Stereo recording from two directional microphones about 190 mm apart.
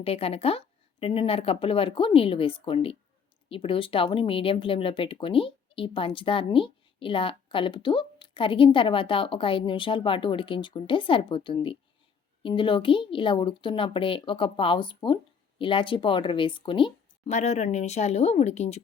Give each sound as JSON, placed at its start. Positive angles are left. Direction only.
{"t": 0.0, "sound": "speech", "side_deg": 30}